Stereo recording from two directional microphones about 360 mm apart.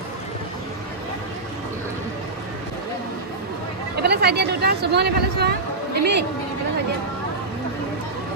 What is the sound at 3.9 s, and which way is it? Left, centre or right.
Speech, right.